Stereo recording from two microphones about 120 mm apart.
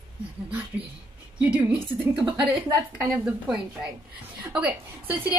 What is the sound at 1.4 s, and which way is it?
A woman's voice, 10° right (ahead or behind).